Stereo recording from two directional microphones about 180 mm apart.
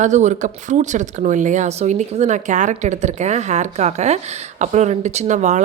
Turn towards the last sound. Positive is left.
turn(degrees=-40)  # may be behind; listen again after turning